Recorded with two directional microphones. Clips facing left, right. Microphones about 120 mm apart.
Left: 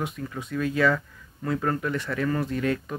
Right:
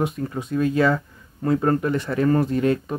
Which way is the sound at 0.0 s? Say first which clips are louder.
Right 7 dB; 35° right (ahead or behind).